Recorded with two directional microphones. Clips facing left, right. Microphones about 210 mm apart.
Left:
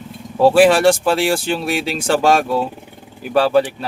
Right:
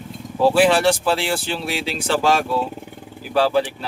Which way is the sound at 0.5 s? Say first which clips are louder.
Left 5 dB; 50° left (ahead or behind).